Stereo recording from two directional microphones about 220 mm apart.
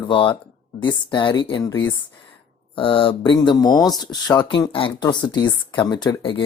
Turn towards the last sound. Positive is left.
turn(degrees=20)  # may be behind; listen again after turning